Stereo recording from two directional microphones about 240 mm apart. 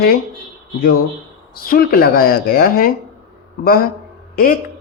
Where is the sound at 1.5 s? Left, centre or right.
Left.